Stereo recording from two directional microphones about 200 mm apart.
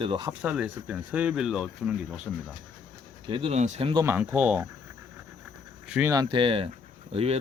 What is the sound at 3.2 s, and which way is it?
Speech, 25° right (ahead or behind).